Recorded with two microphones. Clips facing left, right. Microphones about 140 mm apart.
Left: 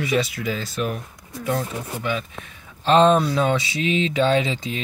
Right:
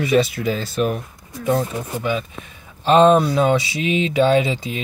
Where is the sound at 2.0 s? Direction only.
15° right (ahead or behind).